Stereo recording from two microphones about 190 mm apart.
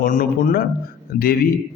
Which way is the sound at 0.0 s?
45° left (ahead or behind).